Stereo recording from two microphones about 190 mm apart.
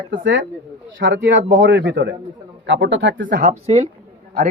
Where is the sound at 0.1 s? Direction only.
70° right (ahead or behind).